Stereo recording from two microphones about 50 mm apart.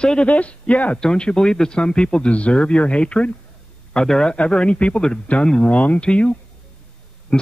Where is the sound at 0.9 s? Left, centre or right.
Centre.